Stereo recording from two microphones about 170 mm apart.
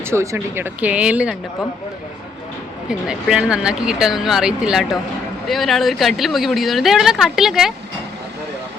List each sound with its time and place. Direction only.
0.0 s speech: 15° right (ahead or behind)
3.1 s a woman's voice: 5° right (ahead or behind)